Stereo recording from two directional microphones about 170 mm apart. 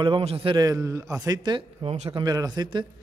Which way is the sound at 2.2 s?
20° right (ahead or behind).